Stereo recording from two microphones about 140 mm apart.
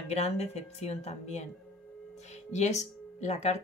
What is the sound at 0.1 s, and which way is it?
Speech, 50° left (ahead or behind).